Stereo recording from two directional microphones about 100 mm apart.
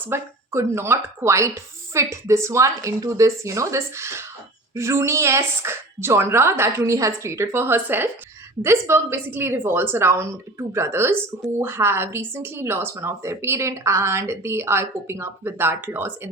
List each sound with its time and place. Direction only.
0.0 s speech: 25° right (ahead or behind)